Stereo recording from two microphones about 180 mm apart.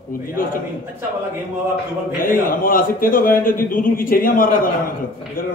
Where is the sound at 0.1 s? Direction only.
55° left (ahead or behind).